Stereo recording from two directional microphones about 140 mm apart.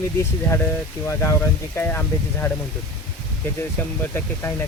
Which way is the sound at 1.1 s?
20° left (ahead or behind).